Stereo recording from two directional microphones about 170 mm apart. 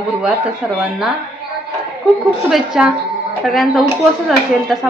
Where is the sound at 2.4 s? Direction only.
5° right (ahead or behind).